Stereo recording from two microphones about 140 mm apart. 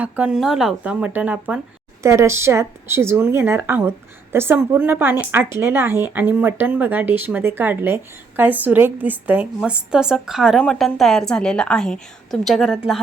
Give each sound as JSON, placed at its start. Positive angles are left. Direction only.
{"t": 0.0, "sound": "speech", "side_deg": -5}
{"t": 2.0, "sound": "speech", "side_deg": -20}